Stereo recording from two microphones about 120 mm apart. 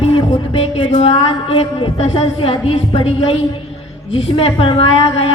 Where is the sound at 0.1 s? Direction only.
45° left (ahead or behind).